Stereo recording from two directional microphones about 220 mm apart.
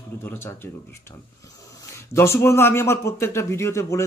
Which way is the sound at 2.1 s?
10° left (ahead or behind).